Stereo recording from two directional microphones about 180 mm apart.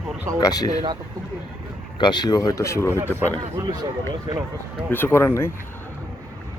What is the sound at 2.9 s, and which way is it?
Speech, 15° right (ahead or behind).